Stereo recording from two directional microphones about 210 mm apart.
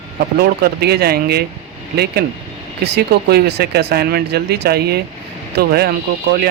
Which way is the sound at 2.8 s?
50° right (ahead or behind).